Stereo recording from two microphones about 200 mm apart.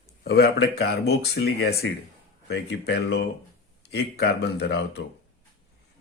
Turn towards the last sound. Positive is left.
turn(degrees=55)  # may be behind; listen again after turning